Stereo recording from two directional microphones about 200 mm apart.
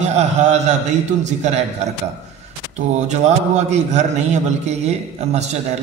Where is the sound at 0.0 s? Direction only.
35° right (ahead or behind).